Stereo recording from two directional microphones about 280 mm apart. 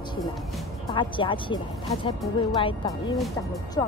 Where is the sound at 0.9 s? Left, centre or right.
Centre.